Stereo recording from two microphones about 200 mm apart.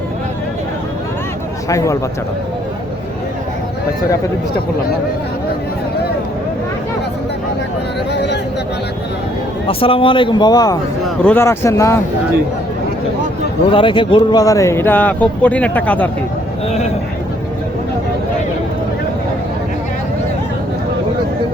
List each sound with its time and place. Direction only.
1.7 s speech: 15° left (ahead or behind)
8.1 s a sound: 60° left (ahead or behind)
9.6 s speech: 25° left (ahead or behind)
13.7 s speech: 25° left (ahead or behind); by 16.0 s 5° left (ahead or behind)